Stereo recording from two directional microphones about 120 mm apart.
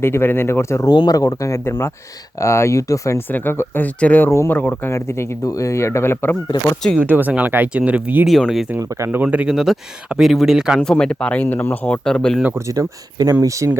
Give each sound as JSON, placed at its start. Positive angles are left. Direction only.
{"t": 0.0, "sound": "speech", "side_deg": 20}
{"t": 7.0, "sound": "speech", "side_deg": -15}
{"t": 8.3, "sound": "speech", "side_deg": 0}
{"t": 8.8, "sound": "speech", "side_deg": -30}
{"t": 9.1, "sound": "speech", "side_deg": -10}
{"t": 10.8, "sound": "speech", "side_deg": 5}
{"t": 12.4, "sound": "speech", "side_deg": -15}
{"t": 12.6, "sound": "speech", "side_deg": -30}